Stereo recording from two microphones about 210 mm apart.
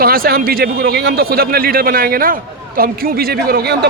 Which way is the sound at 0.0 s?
45° right (ahead or behind).